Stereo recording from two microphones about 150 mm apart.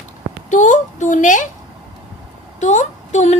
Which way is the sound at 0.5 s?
55° left (ahead or behind).